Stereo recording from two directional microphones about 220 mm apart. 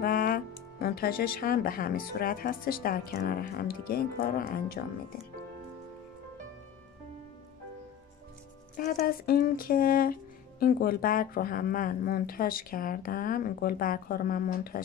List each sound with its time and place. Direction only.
0.0 s speech: 40° left (ahead or behind)
8.7 s speech: 40° left (ahead or behind)